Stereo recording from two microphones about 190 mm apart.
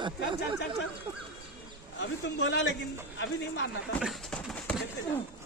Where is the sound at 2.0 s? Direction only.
70° left (ahead or behind).